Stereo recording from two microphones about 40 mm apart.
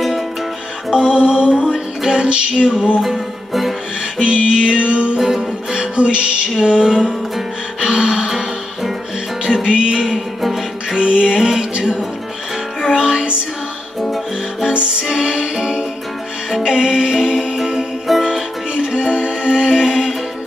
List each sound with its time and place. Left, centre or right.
0.8 s music: centre
2.1 s music: right
3.0 s music: centre
4.2 s music: right
5.2 s music: centre
5.9 s music: right
8.3 s music: centre
9.7 s music: centre
11.0 s music: right
12.9 s music: centre
14.0 s music: centre
14.7 s music: right
15.0 s music: centre